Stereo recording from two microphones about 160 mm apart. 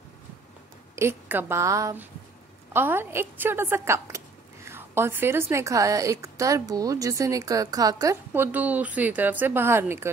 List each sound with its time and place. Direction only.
0.9 s a woman's voice: 15° right (ahead or behind)